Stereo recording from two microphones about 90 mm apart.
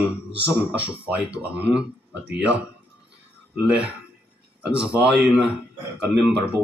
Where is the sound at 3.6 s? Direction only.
15° right (ahead or behind).